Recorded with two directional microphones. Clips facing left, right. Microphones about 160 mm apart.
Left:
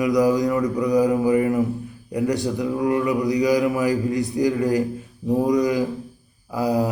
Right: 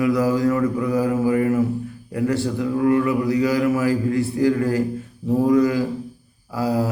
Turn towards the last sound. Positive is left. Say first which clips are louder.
# left 1 dB
turn(degrees=15)  # may be behind; listen again after turning